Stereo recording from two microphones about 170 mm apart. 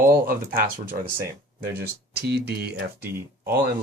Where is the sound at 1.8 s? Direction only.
75° right (ahead or behind).